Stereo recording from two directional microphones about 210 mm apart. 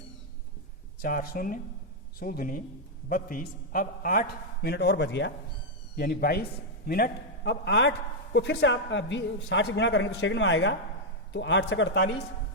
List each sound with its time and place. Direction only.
1.0 s a man's voice: 45° left (ahead or behind)